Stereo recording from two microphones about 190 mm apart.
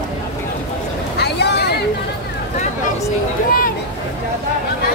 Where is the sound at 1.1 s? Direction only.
60° left (ahead or behind).